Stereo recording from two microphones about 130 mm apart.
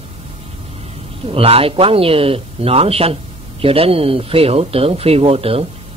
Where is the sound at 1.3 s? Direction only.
45° right (ahead or behind).